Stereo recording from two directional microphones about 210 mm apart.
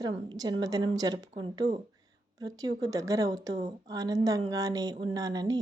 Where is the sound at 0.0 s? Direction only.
20° right (ahead or behind).